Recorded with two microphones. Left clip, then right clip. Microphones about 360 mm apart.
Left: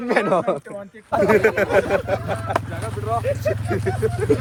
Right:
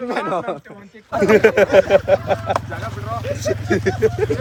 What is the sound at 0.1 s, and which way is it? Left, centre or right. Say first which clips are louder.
Speech: left 5 dB; centre.